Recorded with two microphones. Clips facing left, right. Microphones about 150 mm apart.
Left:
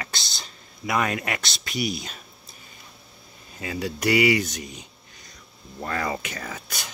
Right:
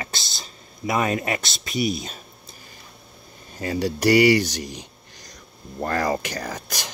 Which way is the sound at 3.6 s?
40° right (ahead or behind).